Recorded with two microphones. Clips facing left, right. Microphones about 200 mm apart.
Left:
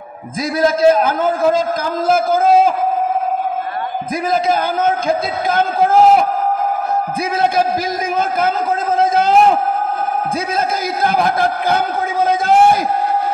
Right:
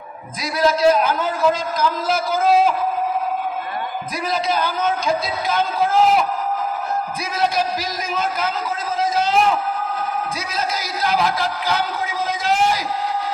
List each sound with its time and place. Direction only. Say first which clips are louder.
0.6 s a man's voice: left 3 dB; 50° left (ahead or behind)
4.3 s a man's voice: left 5 dB; 50° left (ahead or behind)
7.3 s a man's voice: left 4 dB; 50° left (ahead or behind)
11.0 s a sound: left 4 dB; 55° left (ahead or behind)